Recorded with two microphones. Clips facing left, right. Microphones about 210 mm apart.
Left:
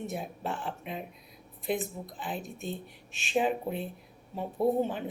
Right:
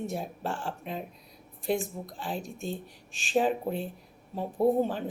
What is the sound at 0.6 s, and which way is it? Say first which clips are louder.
Speech: right 2 dB; 40° right (ahead or behind).